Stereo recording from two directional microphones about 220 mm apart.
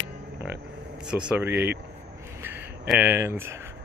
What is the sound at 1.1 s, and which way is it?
Speech, 5° right (ahead or behind).